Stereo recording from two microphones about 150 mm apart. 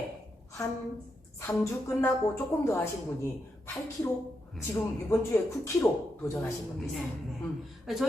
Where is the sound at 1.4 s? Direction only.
15° left (ahead or behind).